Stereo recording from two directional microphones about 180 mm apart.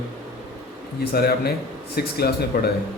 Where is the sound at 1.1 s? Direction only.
60° left (ahead or behind).